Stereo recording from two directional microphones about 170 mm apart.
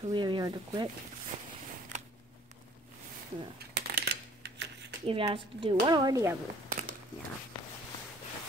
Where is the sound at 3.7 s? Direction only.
70° right (ahead or behind).